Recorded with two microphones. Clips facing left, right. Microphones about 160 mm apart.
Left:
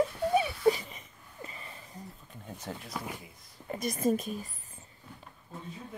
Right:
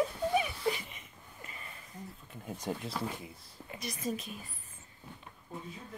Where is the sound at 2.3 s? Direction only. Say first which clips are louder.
Right 4 dB; 5° right (ahead or behind).